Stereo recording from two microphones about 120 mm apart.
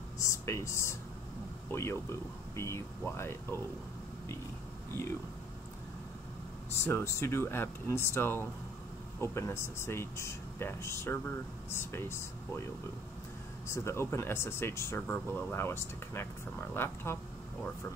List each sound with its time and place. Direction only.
0.2 s speech: 25° left (ahead or behind)
6.8 s speech: 20° left (ahead or behind)
13.7 s speech: 20° left (ahead or behind)